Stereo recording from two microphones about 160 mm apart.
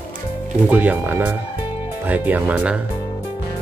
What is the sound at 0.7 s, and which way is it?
Speech, 10° right (ahead or behind).